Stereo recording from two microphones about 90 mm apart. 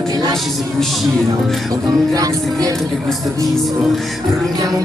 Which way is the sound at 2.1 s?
40° right (ahead or behind).